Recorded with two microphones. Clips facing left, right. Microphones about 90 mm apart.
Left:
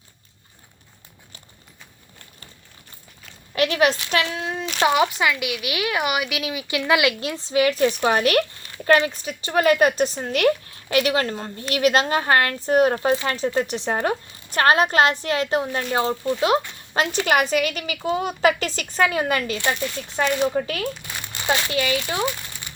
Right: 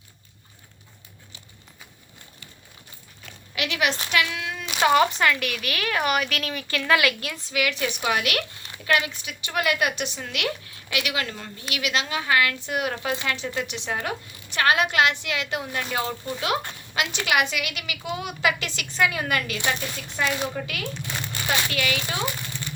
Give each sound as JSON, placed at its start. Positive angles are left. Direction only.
{"t": 3.5, "sound": "speech", "side_deg": 40}
{"t": 4.6, "sound": "a sound", "side_deg": -5}
{"t": 4.9, "sound": "speech", "side_deg": 5}
{"t": 21.4, "sound": "speech", "side_deg": 25}